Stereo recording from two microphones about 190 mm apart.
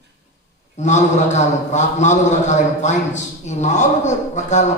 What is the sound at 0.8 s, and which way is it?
A man's voice, 40° left (ahead or behind).